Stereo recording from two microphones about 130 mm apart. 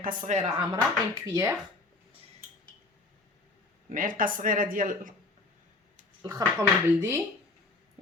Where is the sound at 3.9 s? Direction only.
90° right.